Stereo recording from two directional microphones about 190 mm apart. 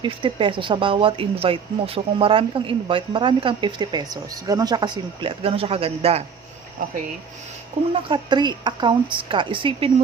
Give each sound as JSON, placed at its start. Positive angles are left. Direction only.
{"t": 0.0, "sound": "speech", "side_deg": -25}
{"t": 7.9, "sound": "speech", "side_deg": -25}